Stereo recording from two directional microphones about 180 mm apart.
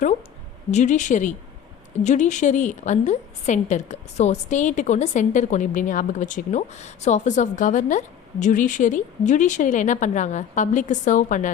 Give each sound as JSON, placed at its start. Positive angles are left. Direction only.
{"t": 0.7, "sound": "a woman's voice", "side_deg": 40}